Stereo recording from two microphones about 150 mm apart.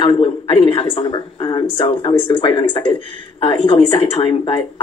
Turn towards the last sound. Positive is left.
turn(degrees=35)  # may be behind; listen again after turning